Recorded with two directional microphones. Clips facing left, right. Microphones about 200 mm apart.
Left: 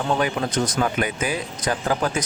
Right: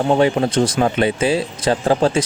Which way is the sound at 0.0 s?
30° right (ahead or behind).